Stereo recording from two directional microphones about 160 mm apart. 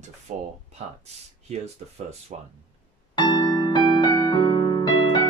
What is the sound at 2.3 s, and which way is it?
Speech, 45° right (ahead or behind).